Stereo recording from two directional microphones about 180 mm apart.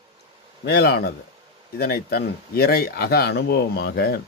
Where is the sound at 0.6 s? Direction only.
65° left (ahead or behind).